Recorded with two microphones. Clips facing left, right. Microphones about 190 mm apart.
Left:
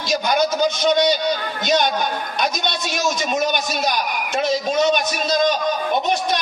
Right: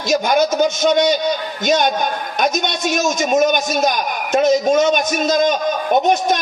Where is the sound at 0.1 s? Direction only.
50° right (ahead or behind).